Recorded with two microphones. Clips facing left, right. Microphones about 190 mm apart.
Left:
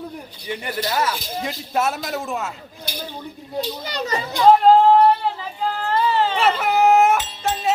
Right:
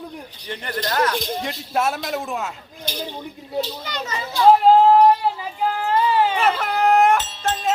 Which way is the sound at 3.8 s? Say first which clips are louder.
Left 4 dB; 35° left (ahead or behind).